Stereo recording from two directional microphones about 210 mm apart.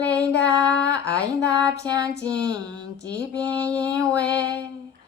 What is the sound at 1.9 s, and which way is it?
Mantra, 15° right (ahead or behind).